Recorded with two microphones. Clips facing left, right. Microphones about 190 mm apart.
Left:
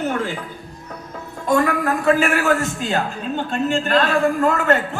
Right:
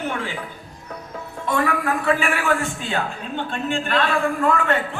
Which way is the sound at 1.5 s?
40° left (ahead or behind).